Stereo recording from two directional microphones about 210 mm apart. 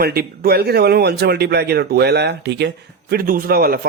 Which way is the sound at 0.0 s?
45° right (ahead or behind).